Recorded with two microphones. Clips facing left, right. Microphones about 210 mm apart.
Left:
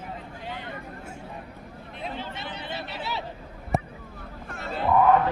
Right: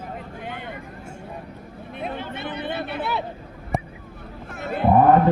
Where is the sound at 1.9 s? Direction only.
55° right (ahead or behind).